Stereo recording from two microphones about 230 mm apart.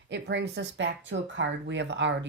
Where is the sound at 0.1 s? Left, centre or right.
Right.